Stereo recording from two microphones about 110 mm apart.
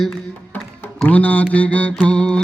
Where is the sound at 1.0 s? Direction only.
15° left (ahead or behind).